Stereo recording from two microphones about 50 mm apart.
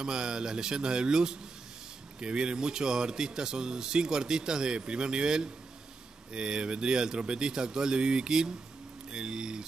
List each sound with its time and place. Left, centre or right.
0.0 s speech: centre